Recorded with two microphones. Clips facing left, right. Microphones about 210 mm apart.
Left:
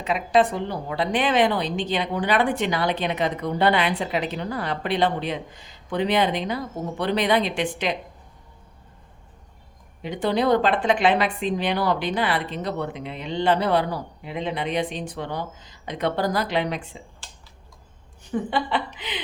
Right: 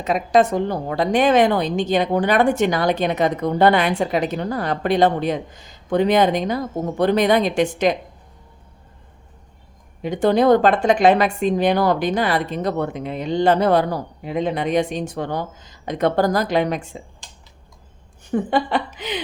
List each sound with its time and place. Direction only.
0.0 s a woman's voice: 45° right (ahead or behind)
10.0 s a woman's voice: 45° right (ahead or behind)
18.3 s a woman's voice: 45° right (ahead or behind)